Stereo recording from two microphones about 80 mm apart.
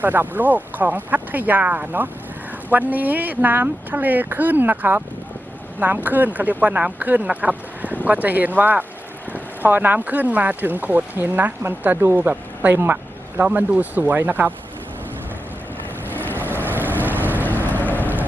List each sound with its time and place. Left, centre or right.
0.0 s speech: right
16.1 s boat: left
16.6 s boat: right
17.4 s boat: left